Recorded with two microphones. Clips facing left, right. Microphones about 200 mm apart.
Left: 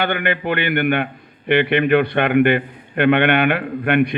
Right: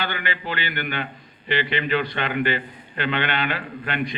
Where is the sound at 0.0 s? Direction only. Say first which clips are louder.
Left 8 dB; 60° left (ahead or behind).